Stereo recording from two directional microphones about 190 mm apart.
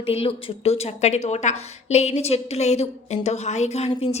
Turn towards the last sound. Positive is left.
turn(degrees=30)  # may be behind; listen again after turning